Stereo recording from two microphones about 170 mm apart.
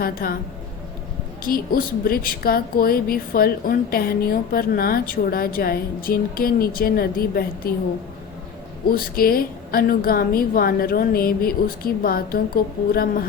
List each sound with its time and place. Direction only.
0.0 s a woman's voice: 60° left (ahead or behind)
1.5 s a woman's voice: 60° left (ahead or behind)
8.9 s a woman's voice: 60° left (ahead or behind)